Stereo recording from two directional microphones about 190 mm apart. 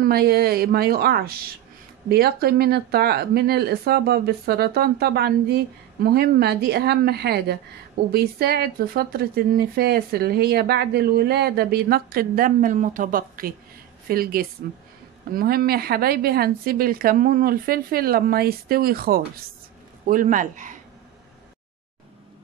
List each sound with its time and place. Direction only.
0.0 s speech: 55° right (ahead or behind)